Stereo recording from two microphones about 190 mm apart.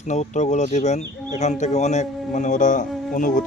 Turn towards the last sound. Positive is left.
turn(degrees=45)  # may be behind; listen again after turning